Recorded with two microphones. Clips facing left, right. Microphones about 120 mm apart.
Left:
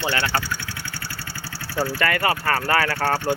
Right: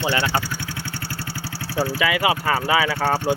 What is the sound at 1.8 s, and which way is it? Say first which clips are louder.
Speech: right 1 dB; 5° right (ahead or behind).